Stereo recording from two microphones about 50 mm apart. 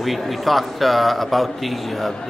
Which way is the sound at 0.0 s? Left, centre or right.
Centre.